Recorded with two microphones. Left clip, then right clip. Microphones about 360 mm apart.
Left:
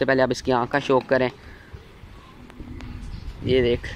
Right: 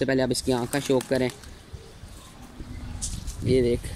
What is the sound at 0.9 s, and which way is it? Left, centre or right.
Speech, left.